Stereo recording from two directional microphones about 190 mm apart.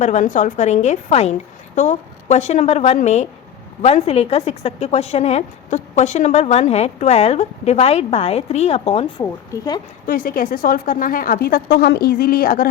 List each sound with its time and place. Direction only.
0.0 s a woman's voice: 40° left (ahead or behind)
9.2 s speech: 20° left (ahead or behind)
10.1 s a woman's voice: 45° left (ahead or behind)